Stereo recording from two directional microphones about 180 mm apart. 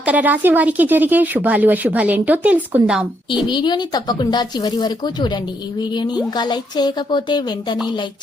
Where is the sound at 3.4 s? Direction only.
25° left (ahead or behind).